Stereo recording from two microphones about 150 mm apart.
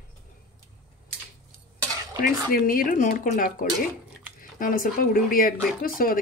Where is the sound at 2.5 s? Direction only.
70° left (ahead or behind).